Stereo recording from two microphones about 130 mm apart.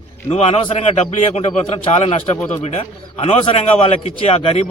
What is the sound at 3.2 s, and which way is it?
Speech, 55° left (ahead or behind).